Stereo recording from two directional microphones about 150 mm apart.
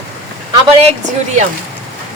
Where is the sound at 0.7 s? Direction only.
45° right (ahead or behind).